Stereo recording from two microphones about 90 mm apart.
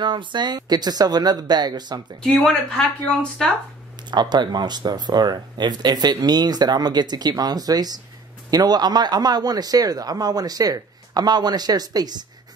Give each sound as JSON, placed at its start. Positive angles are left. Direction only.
{"t": 0.0, "sound": "speech", "side_deg": -60}
{"t": 2.2, "sound": "speech", "side_deg": 5}
{"t": 4.1, "sound": "speech", "side_deg": -55}